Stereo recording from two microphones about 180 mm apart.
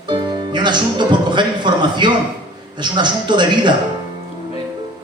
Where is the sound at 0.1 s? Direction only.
25° right (ahead or behind).